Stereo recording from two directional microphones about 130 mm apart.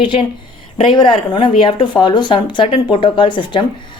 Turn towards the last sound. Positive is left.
turn(degrees=40)  # may be behind; listen again after turning